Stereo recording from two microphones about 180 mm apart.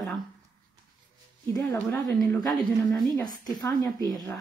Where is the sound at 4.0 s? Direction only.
20° right (ahead or behind).